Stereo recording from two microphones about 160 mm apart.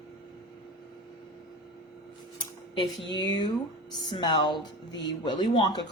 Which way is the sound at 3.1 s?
25° left (ahead or behind).